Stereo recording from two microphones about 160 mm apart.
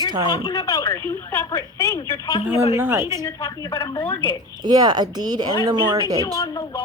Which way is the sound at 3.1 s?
30° left (ahead or behind).